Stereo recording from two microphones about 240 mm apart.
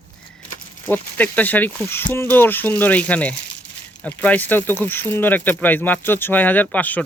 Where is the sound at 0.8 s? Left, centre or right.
Centre.